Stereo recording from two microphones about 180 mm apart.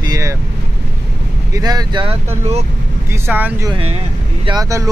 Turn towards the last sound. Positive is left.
turn(degrees=-20)  # may be behind; listen again after turning